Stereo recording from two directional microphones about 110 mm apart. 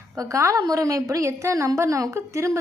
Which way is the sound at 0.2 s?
30° right (ahead or behind).